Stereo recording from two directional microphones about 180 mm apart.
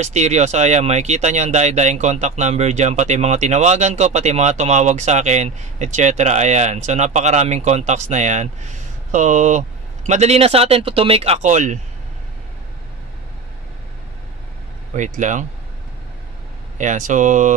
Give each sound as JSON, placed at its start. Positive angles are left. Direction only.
{"t": 0.0, "sound": "speech", "side_deg": -40}
{"t": 15.0, "sound": "speech", "side_deg": -45}
{"t": 16.7, "sound": "speech", "side_deg": -45}